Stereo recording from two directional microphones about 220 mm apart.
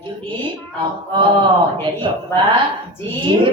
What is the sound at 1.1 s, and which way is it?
A woman's voice, 20° right (ahead or behind).